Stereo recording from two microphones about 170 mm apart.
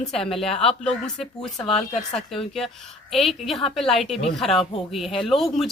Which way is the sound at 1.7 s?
35° left (ahead or behind).